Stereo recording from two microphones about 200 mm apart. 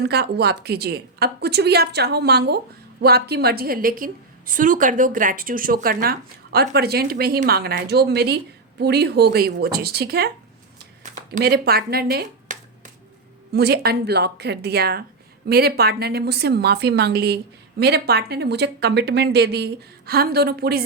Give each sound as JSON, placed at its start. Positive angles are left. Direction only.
{"t": 0.0, "sound": "a woman's voice", "side_deg": -55}
{"t": 11.3, "sound": "a woman's voice", "side_deg": -55}